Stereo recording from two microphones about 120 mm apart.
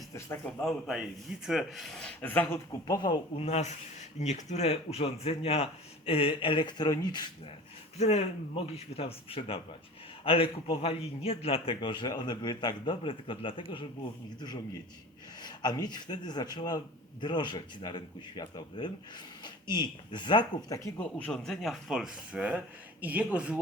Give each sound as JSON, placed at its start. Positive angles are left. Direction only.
{"t": 0.6, "sound": "speech", "side_deg": 0}
{"t": 2.8, "sound": "speech", "side_deg": 35}
{"t": 3.3, "sound": "speech", "side_deg": 60}
{"t": 7.9, "sound": "a man's voice", "side_deg": 65}
{"t": 15.4, "sound": "speech", "side_deg": 35}
{"t": 21.0, "sound": "speech", "side_deg": 10}